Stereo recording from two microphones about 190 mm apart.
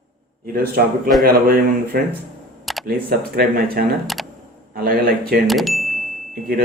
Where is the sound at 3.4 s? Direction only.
50° right (ahead or behind).